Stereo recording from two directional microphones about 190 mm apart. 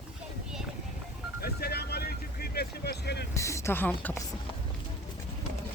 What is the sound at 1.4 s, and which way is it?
Vehicle, 55° left (ahead or behind).